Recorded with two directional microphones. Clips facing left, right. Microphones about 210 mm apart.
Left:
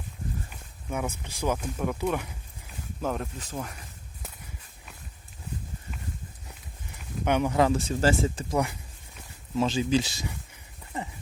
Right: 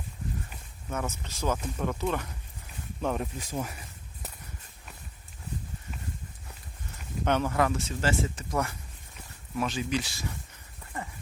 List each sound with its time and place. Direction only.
0.9 s speech: 10° left (ahead or behind)
3.0 s speech: centre (ahead or behind)
7.0 s speech: 10° left (ahead or behind)
7.7 s speech: 35° left (ahead or behind)
9.6 s a sound: 25° left (ahead or behind)